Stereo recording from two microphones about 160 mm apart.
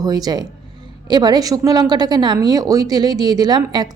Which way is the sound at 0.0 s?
25° right (ahead or behind).